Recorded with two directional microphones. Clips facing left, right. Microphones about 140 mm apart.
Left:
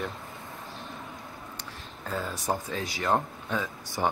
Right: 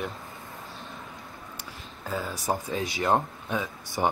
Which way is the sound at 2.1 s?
5° right (ahead or behind).